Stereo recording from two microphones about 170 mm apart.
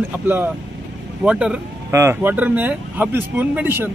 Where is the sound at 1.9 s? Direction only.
15° right (ahead or behind).